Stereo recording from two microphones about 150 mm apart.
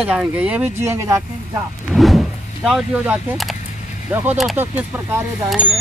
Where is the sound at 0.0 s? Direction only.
5° right (ahead or behind).